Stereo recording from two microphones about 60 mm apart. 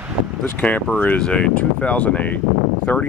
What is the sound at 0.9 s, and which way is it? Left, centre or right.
Speech, left.